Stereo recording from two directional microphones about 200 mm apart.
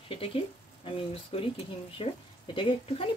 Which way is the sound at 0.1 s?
25° left (ahead or behind).